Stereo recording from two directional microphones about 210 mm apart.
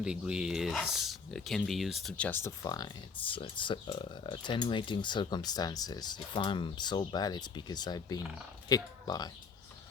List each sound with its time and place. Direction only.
0.0 s speech: 5° right (ahead or behind); by 9.3 s 20° left (ahead or behind)